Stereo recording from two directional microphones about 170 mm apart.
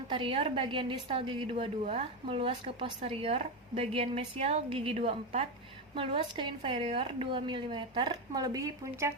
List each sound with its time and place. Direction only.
0.1 s a woman's voice: 30° right (ahead or behind)